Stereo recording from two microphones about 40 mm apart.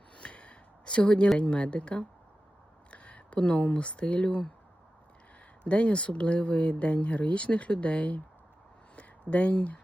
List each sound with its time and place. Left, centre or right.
0.2 s a sound: left
1.4 s speech: left
5.6 s speech: left
9.3 s speech: left